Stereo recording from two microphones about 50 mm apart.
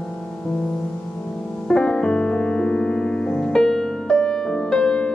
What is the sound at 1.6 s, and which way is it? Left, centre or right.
Music, centre.